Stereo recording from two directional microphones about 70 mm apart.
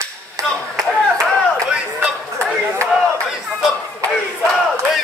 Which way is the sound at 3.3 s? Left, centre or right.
Centre.